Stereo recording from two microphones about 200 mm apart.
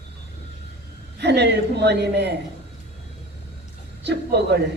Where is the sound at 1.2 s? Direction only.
55° right (ahead or behind).